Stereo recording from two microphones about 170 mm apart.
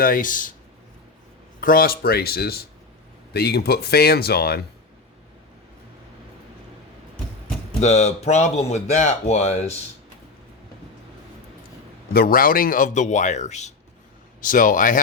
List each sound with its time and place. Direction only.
0.0 s speech: 55° left (ahead or behind)
1.6 s speech: 60° left (ahead or behind)
7.8 s speech: 40° left (ahead or behind)
12.1 s speech: 60° left (ahead or behind)